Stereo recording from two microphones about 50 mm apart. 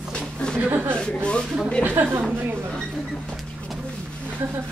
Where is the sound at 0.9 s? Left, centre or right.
Centre.